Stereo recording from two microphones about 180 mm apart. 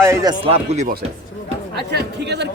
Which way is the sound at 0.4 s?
35° right (ahead or behind).